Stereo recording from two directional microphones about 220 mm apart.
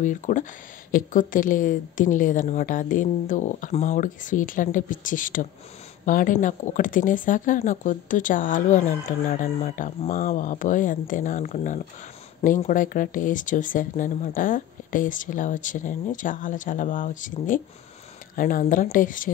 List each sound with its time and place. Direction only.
0.0 s speech: 35° left (ahead or behind)